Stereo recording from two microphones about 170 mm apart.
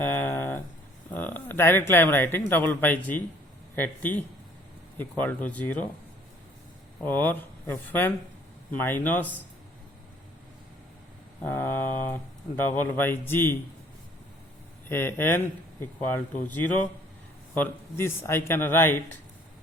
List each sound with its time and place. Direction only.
0.2 s a sound: 10° left (ahead or behind)
1.1 s speech: 10° left (ahead or behind)
7.0 s speech: 10° left (ahead or behind)
11.3 s speech: 15° left (ahead or behind)
14.8 s speech: 15° left (ahead or behind)